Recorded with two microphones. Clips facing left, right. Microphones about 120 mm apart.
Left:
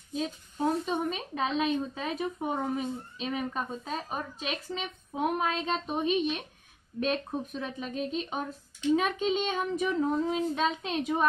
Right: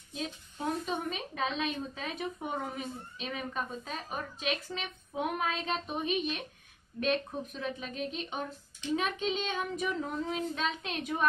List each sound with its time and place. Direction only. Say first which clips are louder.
0.2 s a woman's voice: left 6 dB; 35° left (ahead or behind)
7.6 s a woman's voice: left 2 dB; 40° left (ahead or behind)